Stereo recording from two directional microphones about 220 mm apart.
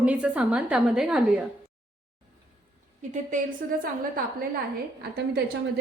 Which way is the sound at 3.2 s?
35° right (ahead or behind).